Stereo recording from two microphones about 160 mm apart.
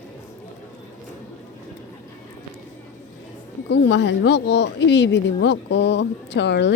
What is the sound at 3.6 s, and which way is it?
Speech, 90° left.